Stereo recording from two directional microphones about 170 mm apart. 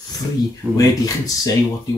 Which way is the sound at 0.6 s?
15° right (ahead or behind).